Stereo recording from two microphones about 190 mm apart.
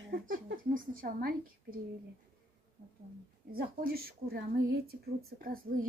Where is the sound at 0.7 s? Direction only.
50° right (ahead or behind).